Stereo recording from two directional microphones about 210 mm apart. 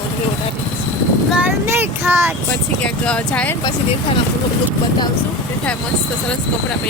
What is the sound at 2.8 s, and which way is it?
Speech, 5° left (ahead or behind).